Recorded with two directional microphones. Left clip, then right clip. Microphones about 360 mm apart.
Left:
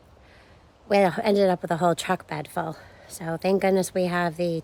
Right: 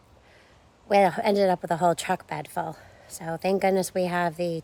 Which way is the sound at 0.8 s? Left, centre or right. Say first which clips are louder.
Even; centre.